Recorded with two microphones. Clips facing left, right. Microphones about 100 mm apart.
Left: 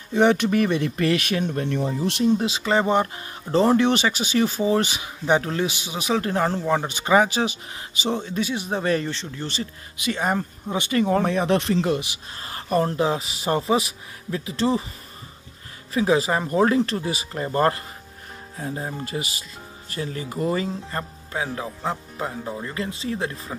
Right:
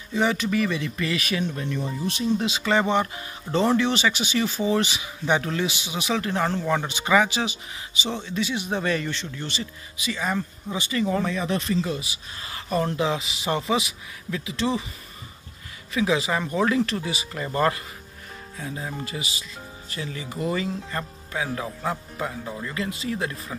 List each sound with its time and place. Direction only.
0.1 s speech: 60° left (ahead or behind)
2.4 s a man's voice: 35° left (ahead or behind)
3.8 s speech: 50° left (ahead or behind)
5.2 s a man's voice: 35° left (ahead or behind)
6.6 s speech: 25° left (ahead or behind)
6.9 s a man's voice: 45° left (ahead or behind)
9.9 s speech: 55° left (ahead or behind); by 12.1 s 70° left (ahead or behind)
12.4 s speech: 45° left (ahead or behind)
15.9 s a man's voice: 40° left (ahead or behind); by 22.7 s 20° left (ahead or behind)
22.7 s a man's voice: 35° left (ahead or behind)